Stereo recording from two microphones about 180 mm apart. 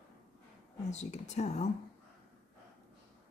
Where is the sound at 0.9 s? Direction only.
40° left (ahead or behind).